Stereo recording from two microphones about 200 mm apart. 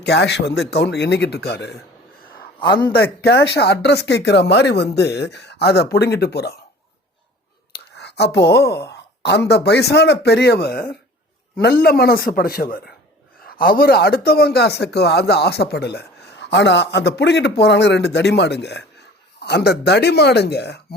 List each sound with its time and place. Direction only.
0.0 s speech: 60° left (ahead or behind)
2.9 s speech: 50° left (ahead or behind)
7.7 s a sound: 55° left (ahead or behind)
9.5 s speech: 55° left (ahead or behind)